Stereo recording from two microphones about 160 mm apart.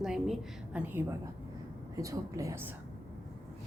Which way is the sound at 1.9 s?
20° right (ahead or behind).